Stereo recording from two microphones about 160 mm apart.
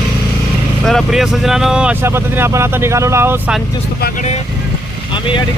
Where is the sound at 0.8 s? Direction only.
Centre (ahead or behind).